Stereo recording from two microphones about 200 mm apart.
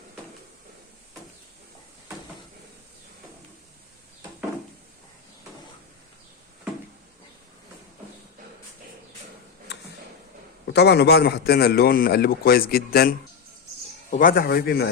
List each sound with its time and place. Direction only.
10.7 s a man's voice: 55° left (ahead or behind)